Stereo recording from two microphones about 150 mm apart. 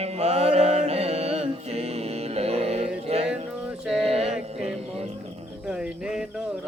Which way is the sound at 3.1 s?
45° right (ahead or behind).